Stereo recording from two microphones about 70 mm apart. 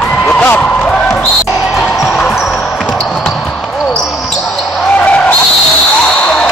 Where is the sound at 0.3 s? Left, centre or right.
Left.